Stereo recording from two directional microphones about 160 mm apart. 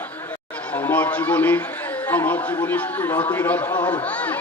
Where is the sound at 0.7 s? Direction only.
10° left (ahead or behind).